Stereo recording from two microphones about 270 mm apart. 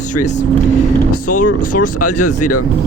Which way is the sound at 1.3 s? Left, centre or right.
Left.